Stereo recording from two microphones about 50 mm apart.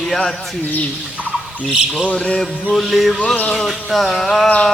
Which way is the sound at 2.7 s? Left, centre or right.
Centre.